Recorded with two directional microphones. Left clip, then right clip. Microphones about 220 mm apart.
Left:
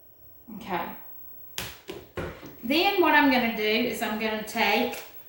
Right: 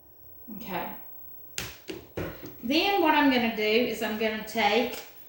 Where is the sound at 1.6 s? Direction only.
10° right (ahead or behind).